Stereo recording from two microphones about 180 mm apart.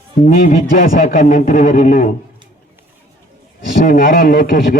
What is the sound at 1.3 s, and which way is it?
Speech, 50° left (ahead or behind).